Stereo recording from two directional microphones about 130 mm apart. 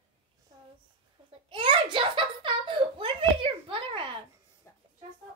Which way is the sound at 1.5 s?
40° right (ahead or behind).